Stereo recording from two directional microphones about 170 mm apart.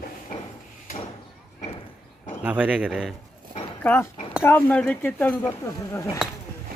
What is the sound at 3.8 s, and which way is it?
Speech, 10° left (ahead or behind).